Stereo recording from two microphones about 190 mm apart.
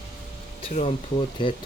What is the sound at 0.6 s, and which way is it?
Speech, 35° left (ahead or behind).